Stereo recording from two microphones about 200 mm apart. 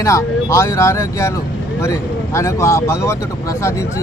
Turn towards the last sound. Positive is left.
turn(degrees=15)  # may be behind; listen again after turning